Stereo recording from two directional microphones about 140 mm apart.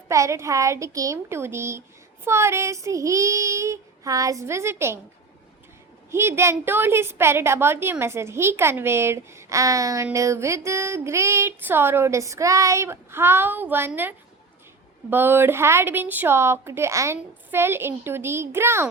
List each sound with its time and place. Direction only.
0.1 s a woman's voice: 20° right (ahead or behind)
6.1 s a woman's voice: 20° right (ahead or behind)